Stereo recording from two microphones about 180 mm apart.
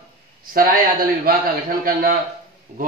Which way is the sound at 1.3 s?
50° right (ahead or behind).